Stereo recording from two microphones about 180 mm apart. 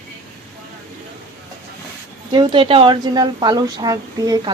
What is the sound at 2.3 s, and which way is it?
A woman's voice, 25° right (ahead or behind).